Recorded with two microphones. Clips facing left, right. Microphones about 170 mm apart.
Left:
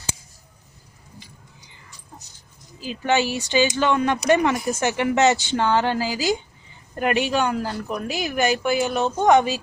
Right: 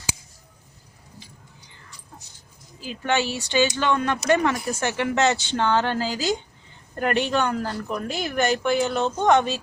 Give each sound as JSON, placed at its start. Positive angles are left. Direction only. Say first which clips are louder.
{"t": 2.8, "sound": "speech", "louder": "left 3 dB", "side_deg": 15}